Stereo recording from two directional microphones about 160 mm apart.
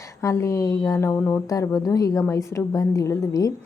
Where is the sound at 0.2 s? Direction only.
20° left (ahead or behind).